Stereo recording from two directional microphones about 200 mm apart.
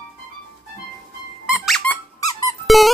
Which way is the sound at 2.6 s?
Centre (ahead or behind).